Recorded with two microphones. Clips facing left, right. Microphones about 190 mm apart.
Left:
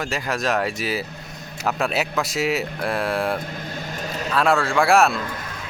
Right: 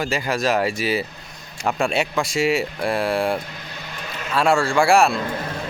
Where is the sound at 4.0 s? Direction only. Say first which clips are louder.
Left 3 dB; 40° left (ahead or behind).